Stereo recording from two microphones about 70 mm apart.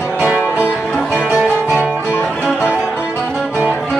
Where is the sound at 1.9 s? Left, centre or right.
Left.